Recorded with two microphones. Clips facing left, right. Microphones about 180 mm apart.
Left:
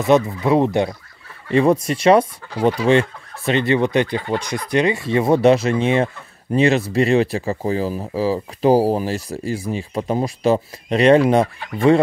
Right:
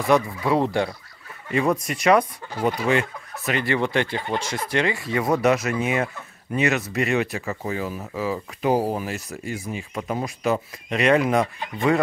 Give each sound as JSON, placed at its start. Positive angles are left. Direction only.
{"t": 0.0, "sound": "fowl", "side_deg": 25}
{"t": 1.5, "sound": "speech", "side_deg": 30}
{"t": 2.6, "sound": "fowl", "side_deg": 30}
{"t": 6.5, "sound": "speech", "side_deg": 30}